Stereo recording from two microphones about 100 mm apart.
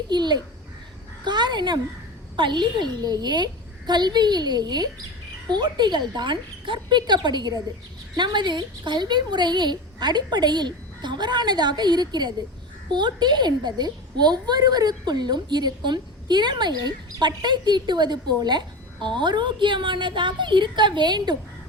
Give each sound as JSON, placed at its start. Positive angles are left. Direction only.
{"t": 0.1, "sound": "a woman's voice", "side_deg": -45}